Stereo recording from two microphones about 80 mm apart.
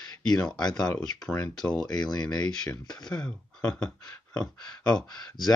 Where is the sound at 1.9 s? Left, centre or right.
Left.